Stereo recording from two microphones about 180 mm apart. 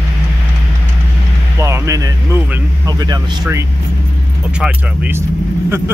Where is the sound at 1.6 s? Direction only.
15° right (ahead or behind).